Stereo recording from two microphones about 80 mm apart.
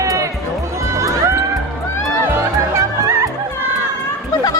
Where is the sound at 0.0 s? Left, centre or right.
Right.